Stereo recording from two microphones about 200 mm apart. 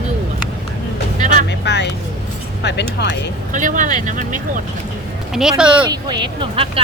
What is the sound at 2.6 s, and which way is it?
Speech, 60° left (ahead or behind).